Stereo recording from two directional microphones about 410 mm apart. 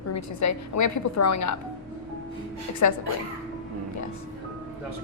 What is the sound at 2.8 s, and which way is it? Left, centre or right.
Speech, left.